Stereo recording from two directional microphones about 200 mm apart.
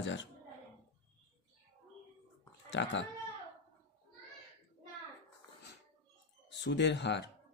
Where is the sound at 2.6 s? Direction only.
65° left (ahead or behind).